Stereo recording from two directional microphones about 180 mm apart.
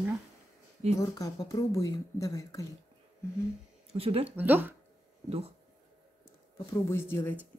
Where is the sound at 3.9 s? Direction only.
30° right (ahead or behind).